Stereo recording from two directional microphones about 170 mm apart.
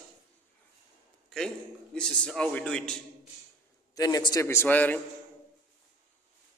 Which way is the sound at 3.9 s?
20° left (ahead or behind).